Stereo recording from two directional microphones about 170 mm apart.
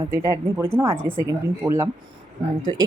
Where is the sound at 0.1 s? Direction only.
15° right (ahead or behind).